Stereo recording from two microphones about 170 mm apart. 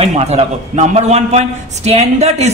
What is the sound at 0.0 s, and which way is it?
A man's voice, 40° right (ahead or behind).